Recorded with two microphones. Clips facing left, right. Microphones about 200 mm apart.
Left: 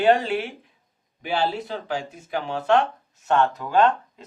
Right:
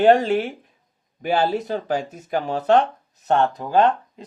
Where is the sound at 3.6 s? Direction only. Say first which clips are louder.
Right 3 dB; 25° right (ahead or behind).